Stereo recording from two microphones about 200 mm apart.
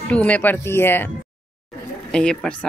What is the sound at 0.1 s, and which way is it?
Speech, 5° left (ahead or behind).